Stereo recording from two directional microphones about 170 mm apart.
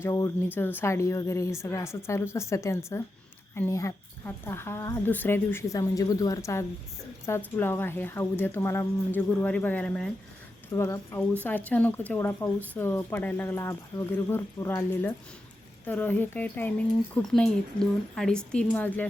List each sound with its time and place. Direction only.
0.0 s speech: 15° left (ahead or behind)
10.7 s a woman's voice: 15° left (ahead or behind)